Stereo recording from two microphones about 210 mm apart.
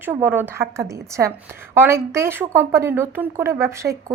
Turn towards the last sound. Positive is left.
turn(degrees=-15)  # may be behind; listen again after turning